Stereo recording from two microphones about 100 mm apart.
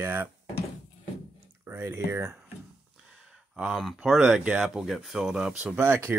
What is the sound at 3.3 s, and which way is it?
Speech, 5° right (ahead or behind).